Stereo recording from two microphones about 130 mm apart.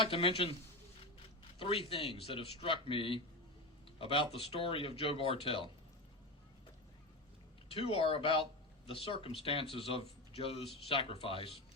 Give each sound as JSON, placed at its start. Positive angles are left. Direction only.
{"t": 0.0, "sound": "speech", "side_deg": 45}
{"t": 1.5, "sound": "speech", "side_deg": 45}
{"t": 7.7, "sound": "speech", "side_deg": 45}